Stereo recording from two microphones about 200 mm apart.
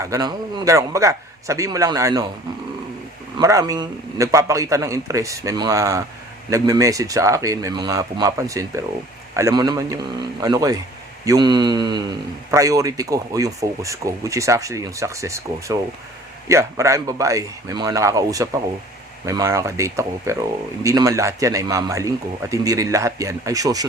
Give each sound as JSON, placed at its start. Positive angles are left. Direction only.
{"t": 0.0, "sound": "speech", "side_deg": -15}
{"t": 3.3, "sound": "speech", "side_deg": -15}
{"t": 11.3, "sound": "mantra", "side_deg": -20}
{"t": 12.5, "sound": "speech", "side_deg": -15}